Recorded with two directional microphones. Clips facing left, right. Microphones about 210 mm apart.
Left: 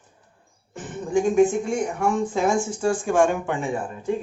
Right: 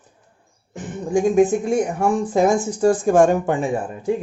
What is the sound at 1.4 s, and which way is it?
Speech, 40° right (ahead or behind).